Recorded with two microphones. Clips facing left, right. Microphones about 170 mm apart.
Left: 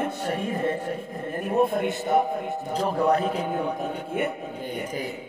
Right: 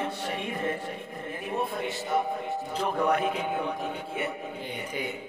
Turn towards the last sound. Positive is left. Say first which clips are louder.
# left 3 dB
turn(degrees=40)  # may be behind; listen again after turning